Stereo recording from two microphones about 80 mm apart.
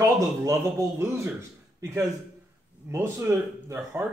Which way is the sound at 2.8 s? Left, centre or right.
Right.